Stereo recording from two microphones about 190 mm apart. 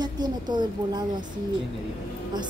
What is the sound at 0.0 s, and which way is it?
A woman's voice, 20° right (ahead or behind).